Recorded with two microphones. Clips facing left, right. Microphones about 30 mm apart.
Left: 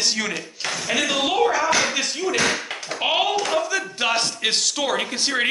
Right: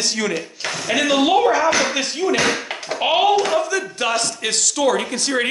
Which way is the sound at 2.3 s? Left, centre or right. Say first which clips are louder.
Right 3 dB; centre.